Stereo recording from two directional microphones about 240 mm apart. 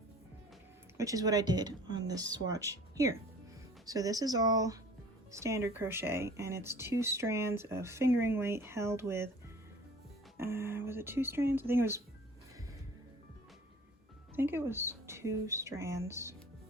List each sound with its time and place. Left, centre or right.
0.9 s speech: centre
10.3 s speech: centre
14.3 s speech: centre